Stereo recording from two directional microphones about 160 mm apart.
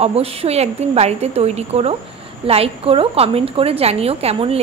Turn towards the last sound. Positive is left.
turn(degrees=-40)  # may be behind; listen again after turning